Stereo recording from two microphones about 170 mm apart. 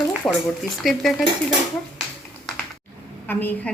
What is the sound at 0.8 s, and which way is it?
Speech, centre (ahead or behind).